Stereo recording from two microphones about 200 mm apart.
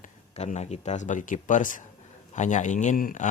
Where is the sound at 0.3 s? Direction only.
35° left (ahead or behind).